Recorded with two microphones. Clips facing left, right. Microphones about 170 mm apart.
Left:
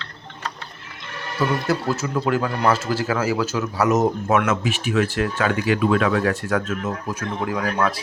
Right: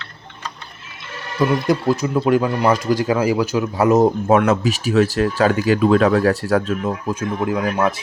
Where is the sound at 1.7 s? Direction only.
15° right (ahead or behind); by 6.8 s 35° right (ahead or behind).